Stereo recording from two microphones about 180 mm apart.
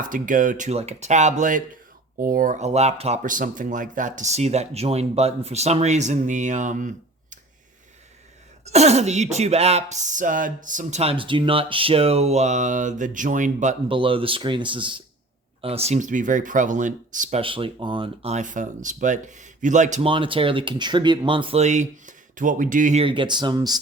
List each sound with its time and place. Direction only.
0.0 s speech: 45° right (ahead or behind)
8.6 s speech: 35° right (ahead or behind)
13.8 s speech: 30° right (ahead or behind); by 17.4 s 45° right (ahead or behind)
17.4 s speech: 30° right (ahead or behind)
20.1 s speech: 30° right (ahead or behind); by 23.0 s 45° right (ahead or behind)
23.0 s speech: 25° right (ahead or behind)